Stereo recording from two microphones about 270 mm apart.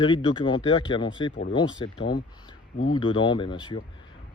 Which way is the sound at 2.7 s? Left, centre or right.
Left.